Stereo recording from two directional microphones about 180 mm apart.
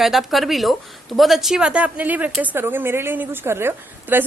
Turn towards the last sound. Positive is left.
turn(degrees=-10)  # may be behind; listen again after turning